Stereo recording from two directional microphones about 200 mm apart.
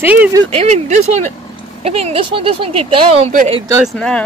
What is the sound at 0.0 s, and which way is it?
Speech, 10° right (ahead or behind).